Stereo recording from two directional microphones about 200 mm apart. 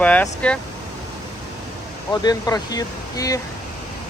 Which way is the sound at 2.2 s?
20° left (ahead or behind).